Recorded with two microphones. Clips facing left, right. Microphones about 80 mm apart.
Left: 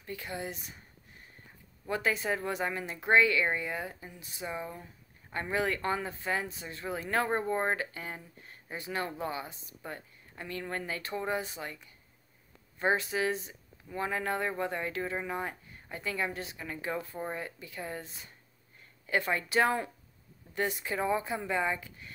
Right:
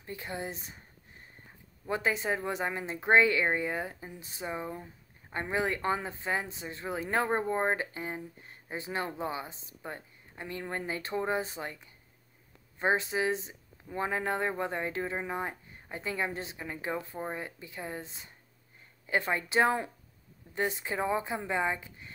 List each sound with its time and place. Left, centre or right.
0.0 s speech: right
1.9 s speech: right